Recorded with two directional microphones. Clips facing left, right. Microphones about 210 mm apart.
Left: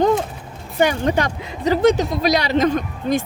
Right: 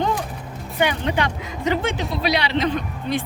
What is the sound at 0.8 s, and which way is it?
Speech, 45° left (ahead or behind).